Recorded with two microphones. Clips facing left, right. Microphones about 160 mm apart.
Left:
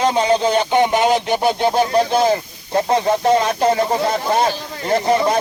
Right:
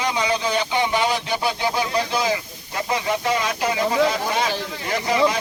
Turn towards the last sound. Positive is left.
turn(degrees=45)  # may be behind; listen again after turning